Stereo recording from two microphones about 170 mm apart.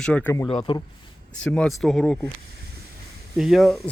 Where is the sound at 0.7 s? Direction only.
30° left (ahead or behind).